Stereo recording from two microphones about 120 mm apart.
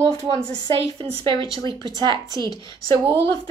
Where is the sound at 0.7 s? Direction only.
45° right (ahead or behind).